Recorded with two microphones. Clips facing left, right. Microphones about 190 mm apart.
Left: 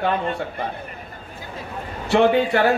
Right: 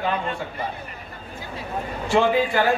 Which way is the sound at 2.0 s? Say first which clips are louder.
Left 3 dB; 70° left (ahead or behind).